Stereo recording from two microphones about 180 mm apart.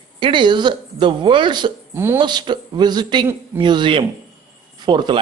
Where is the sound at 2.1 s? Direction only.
25° right (ahead or behind).